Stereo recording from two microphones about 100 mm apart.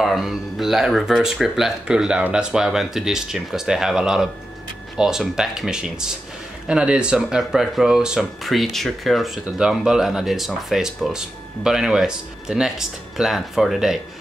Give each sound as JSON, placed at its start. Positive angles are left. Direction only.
{"t": 0.0, "sound": "speech", "side_deg": 0}